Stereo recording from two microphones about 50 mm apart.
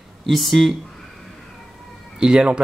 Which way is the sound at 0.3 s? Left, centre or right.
Centre.